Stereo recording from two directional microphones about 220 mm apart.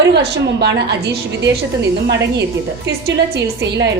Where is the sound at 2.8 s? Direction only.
45° right (ahead or behind).